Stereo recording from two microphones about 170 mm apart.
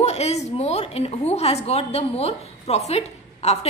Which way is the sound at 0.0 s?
40° left (ahead or behind).